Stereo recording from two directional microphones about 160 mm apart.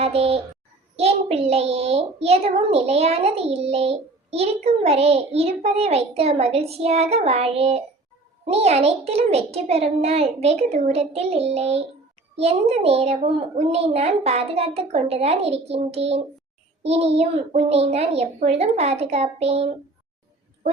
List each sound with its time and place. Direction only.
0.0 s a child's voice: 40° right (ahead or behind)